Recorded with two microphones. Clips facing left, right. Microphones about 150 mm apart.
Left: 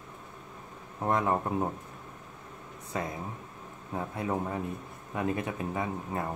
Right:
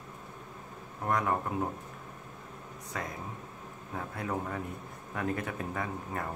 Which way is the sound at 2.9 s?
25° left (ahead or behind).